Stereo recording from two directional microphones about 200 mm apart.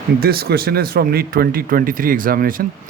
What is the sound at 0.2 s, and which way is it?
A man's voice, 50° right (ahead or behind).